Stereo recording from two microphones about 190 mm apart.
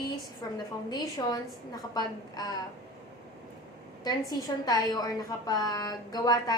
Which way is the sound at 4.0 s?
20° left (ahead or behind).